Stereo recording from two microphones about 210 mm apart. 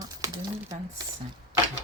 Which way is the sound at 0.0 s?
20° right (ahead or behind).